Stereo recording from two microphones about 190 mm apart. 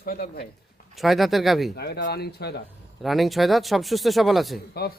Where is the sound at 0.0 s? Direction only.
50° left (ahead or behind).